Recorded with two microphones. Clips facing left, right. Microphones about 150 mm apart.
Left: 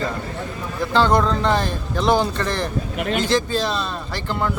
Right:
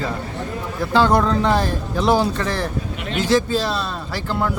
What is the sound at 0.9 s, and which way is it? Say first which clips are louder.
A man's voice: right 1 dB; 5° right (ahead or behind).